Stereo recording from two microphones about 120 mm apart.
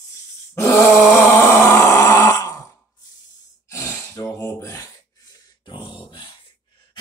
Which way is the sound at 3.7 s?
25° left (ahead or behind).